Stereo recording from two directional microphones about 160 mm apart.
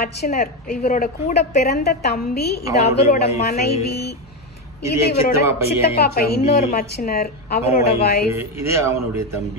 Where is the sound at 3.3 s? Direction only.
45° left (ahead or behind).